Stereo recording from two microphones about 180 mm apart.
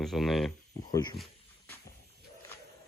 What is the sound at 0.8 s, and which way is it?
Speech, 20° left (ahead or behind).